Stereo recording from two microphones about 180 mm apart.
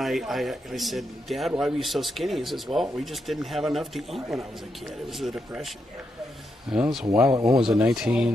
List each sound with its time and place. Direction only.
0.0 s a man's voice: centre (ahead or behind)
6.7 s a man's voice: centre (ahead or behind)
7.1 s speech: 15° right (ahead or behind)
7.5 s a man's voice: 5° right (ahead or behind)